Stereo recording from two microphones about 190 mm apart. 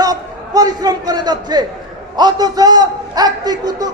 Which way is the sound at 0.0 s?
20° right (ahead or behind).